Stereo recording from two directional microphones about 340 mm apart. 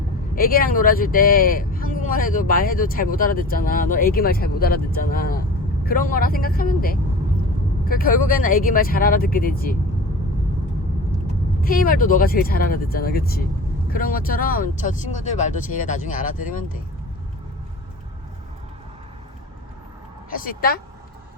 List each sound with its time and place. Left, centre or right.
0.3 s speech: left
11.6 s speech: left
20.3 s speech: left